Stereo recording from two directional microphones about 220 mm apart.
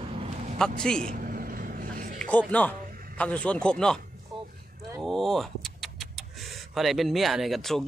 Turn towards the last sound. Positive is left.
turn(degrees=0)  # may be behind; listen again after turning